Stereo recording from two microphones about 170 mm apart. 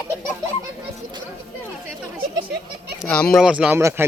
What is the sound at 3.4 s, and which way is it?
Speech, 5° right (ahead or behind).